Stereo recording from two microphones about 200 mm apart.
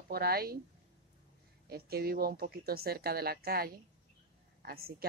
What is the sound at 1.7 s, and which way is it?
Speech, 50° right (ahead or behind).